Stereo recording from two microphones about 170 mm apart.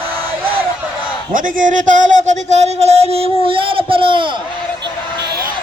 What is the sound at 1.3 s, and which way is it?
Speech, 50° right (ahead or behind).